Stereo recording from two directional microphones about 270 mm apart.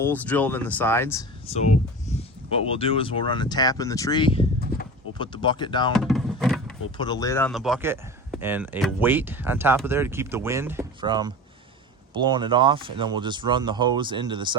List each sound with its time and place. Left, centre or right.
0.0 s speech: centre
2.5 s speech: centre
5.9 s a sound: centre
6.9 s speech: centre